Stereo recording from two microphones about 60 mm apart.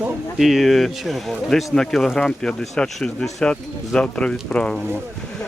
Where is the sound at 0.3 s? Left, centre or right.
Centre.